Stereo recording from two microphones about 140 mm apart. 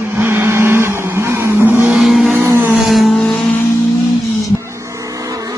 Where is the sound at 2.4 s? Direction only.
20° right (ahead or behind).